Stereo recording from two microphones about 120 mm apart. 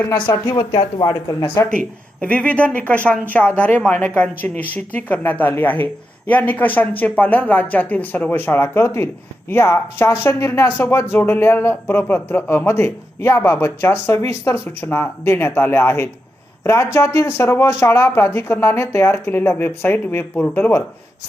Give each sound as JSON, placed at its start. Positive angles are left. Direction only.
{"t": 0.5, "sound": "speech", "side_deg": 40}
{"t": 2.2, "sound": "speech", "side_deg": 10}